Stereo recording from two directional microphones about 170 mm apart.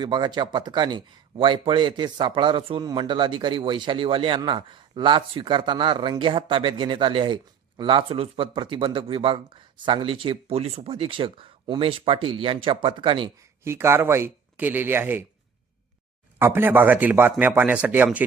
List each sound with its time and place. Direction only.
0.0 s speech: 25° right (ahead or behind)
13.7 s speech: 15° right (ahead or behind)
16.4 s speech: 15° right (ahead or behind)